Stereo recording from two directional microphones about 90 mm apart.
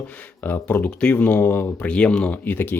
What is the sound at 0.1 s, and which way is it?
Speech, 20° left (ahead or behind).